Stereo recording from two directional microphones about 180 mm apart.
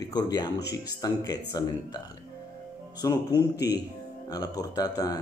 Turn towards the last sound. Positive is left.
turn(degrees=20)  # may be behind; listen again after turning